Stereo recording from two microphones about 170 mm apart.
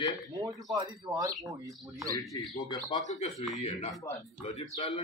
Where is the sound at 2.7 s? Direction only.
25° left (ahead or behind).